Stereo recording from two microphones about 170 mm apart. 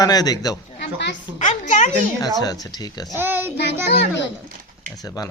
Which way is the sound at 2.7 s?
25° left (ahead or behind).